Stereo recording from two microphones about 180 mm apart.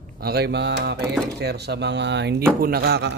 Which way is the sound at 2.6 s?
60° right (ahead or behind).